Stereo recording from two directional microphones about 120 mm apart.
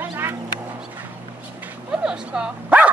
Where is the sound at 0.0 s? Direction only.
20° right (ahead or behind).